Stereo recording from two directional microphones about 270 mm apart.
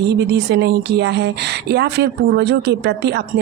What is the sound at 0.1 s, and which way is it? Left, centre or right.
Speech, right.